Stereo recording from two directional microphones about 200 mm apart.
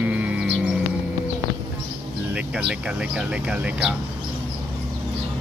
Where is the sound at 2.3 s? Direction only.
5° right (ahead or behind).